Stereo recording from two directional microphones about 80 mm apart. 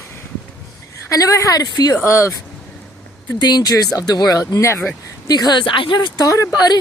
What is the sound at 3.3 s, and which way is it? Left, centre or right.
Speech, left.